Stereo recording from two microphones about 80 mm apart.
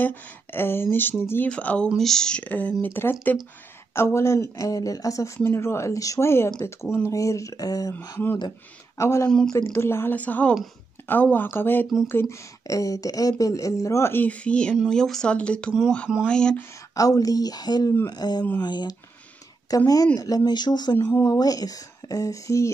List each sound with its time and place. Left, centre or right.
0.0 s speech: left
1.5 s speech: centre
2.0 s speech: centre; by 7.9 s left
8.9 s speech: left
10.1 s speech: centre
12.6 s speech: left
14.1 s speech: centre
16.9 s speech: left
19.7 s speech: left